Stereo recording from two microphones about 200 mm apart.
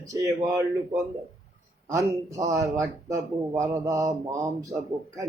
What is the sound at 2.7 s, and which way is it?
Speech, 15° right (ahead or behind).